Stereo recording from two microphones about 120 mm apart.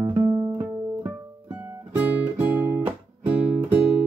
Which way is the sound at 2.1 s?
20° right (ahead or behind).